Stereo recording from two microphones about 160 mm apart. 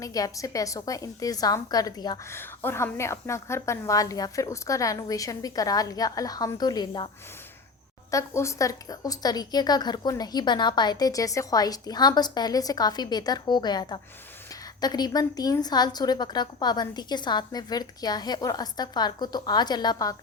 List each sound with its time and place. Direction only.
0.0 s a woman's voice: 20° left (ahead or behind)
8.1 s a woman's voice: 15° left (ahead or behind)